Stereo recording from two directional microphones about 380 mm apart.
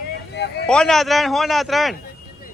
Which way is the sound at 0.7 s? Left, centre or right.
Centre.